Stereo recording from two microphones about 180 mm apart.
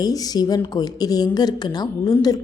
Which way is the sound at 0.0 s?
20° left (ahead or behind).